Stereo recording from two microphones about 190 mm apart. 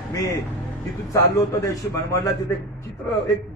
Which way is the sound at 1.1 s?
15° left (ahead or behind).